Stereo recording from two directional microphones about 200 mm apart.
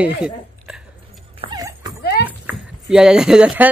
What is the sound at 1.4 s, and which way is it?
Dog, 20° right (ahead or behind).